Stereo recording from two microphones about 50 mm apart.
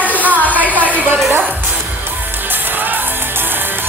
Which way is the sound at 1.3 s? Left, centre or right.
Right.